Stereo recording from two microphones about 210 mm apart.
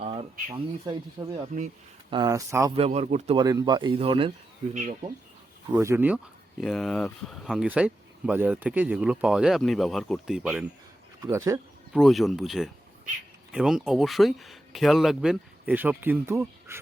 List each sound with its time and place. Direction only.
0.0 s a sound: 30° right (ahead or behind)
0.5 s speech: 20° right (ahead or behind)
2.7 s speech: 30° right (ahead or behind)
3.3 s speech: 15° right (ahead or behind)
4.7 s speech: 35° right (ahead or behind)
5.7 s speech: 15° right (ahead or behind)
6.6 s speech: centre (ahead or behind)
11.2 s speech: 15° right (ahead or behind)
11.9 s speech: centre (ahead or behind)